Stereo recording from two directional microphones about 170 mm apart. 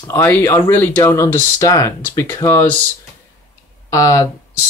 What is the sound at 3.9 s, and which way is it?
Speech, 20° left (ahead or behind).